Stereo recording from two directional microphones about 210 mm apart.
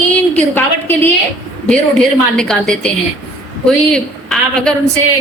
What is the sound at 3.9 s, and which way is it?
Speech, 5° left (ahead or behind).